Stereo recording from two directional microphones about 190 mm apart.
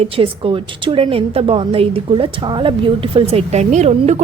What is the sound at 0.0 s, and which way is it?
A woman's voice, 30° right (ahead or behind).